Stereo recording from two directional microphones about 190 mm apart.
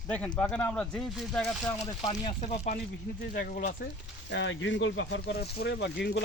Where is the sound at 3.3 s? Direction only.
50° left (ahead or behind).